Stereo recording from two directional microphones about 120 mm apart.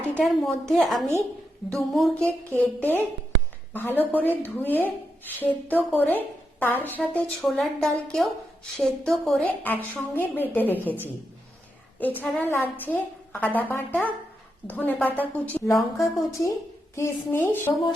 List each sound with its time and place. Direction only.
0.1 s a woman's voice: 5° left (ahead or behind)
2.5 s a woman's voice: 15° left (ahead or behind)
7.4 s a woman's voice: 5° left (ahead or behind)
9.6 s a woman's voice: 15° left (ahead or behind)